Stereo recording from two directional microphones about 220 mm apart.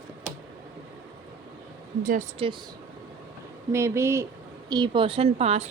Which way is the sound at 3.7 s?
10° right (ahead or behind).